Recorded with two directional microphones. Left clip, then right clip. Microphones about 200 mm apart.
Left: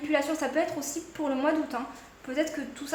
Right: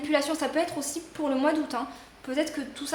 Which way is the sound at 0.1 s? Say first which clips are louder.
Right 1 dB; 25° right (ahead or behind).